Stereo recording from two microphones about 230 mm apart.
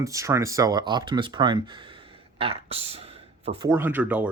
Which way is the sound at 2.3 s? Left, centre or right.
Right.